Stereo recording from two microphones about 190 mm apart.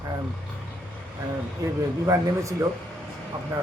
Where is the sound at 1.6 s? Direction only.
20° right (ahead or behind).